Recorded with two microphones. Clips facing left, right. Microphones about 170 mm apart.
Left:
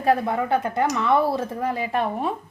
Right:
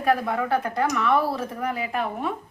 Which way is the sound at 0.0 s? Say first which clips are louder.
Left 2 dB; 25° left (ahead or behind).